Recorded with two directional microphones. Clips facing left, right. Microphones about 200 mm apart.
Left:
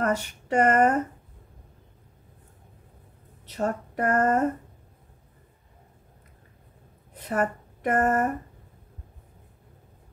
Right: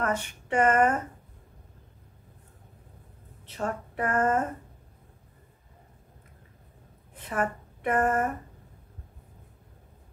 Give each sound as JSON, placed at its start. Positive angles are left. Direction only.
{"t": 0.0, "sound": "speech", "side_deg": 40}
{"t": 3.4, "sound": "speech", "side_deg": 40}
{"t": 7.2, "sound": "speech", "side_deg": 40}